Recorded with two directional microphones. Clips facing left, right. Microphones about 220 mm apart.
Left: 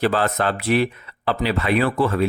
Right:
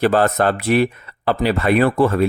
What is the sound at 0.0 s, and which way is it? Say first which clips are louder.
Speech: right 5 dB; 45° right (ahead or behind).